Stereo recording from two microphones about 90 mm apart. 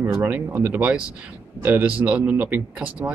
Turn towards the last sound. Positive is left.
turn(degrees=-15)  # may be behind; listen again after turning